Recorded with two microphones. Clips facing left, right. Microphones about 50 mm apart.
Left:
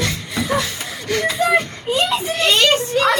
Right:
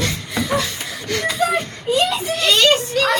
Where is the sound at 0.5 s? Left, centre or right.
Left.